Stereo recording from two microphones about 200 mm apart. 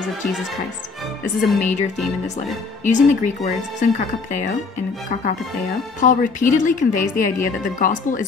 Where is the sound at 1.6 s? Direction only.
40° left (ahead or behind).